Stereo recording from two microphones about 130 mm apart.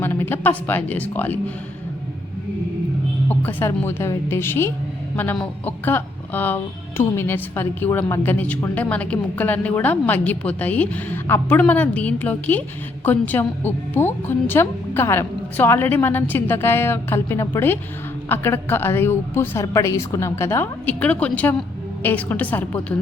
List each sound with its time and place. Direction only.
0.0 s speech: 15° left (ahead or behind)
3.2 s a woman's voice: 20° left (ahead or behind)
21.0 s speech: 10° left (ahead or behind)